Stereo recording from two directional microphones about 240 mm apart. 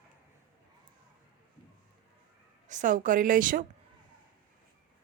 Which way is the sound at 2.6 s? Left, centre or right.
Right.